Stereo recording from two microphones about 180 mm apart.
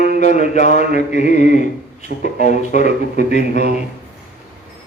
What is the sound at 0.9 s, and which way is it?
Music, 40° left (ahead or behind).